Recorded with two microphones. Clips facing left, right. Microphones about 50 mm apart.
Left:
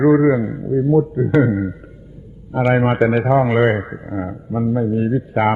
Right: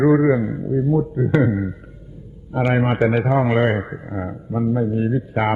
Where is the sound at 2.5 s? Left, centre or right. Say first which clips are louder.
Left 3 dB; left.